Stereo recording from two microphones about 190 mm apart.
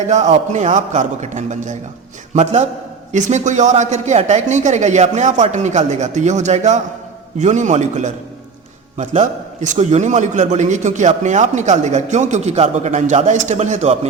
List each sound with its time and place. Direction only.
0.1 s a man's voice: 40° right (ahead or behind)